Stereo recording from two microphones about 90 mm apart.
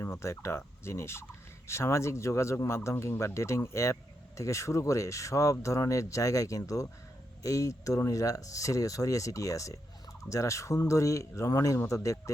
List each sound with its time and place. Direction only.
0.0 s speech: 30° left (ahead or behind)